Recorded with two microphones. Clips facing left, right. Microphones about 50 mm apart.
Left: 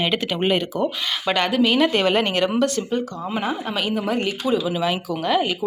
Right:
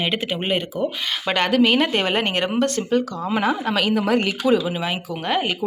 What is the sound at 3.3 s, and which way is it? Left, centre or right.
A woman's voice, right.